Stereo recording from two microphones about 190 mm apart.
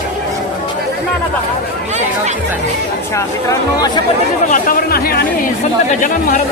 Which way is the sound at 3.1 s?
15° left (ahead or behind).